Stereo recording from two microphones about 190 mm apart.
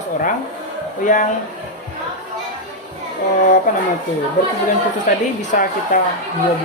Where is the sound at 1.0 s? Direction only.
45° left (ahead or behind).